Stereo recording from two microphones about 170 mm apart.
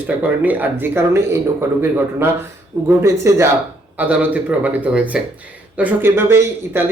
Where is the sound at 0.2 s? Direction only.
10° right (ahead or behind).